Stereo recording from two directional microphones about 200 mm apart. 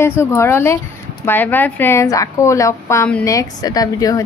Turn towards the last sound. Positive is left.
turn(degrees=15)  # may be behind; listen again after turning